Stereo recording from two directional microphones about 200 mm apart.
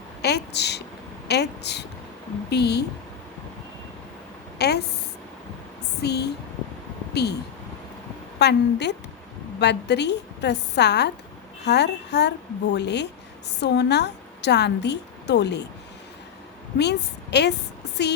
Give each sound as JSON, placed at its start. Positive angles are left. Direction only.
{"t": 0.2, "sound": "a woman's voice", "side_deg": 55}
{"t": 4.5, "sound": "a woman's voice", "side_deg": 55}
{"t": 6.0, "sound": "a woman's voice", "side_deg": 55}
{"t": 8.4, "sound": "a woman's voice", "side_deg": 55}
{"t": 16.7, "sound": "a woman's voice", "side_deg": 55}
{"t": 17.8, "sound": "music", "side_deg": 55}